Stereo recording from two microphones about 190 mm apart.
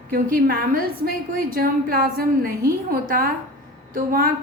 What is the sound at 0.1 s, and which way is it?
A woman's voice, 55° right (ahead or behind).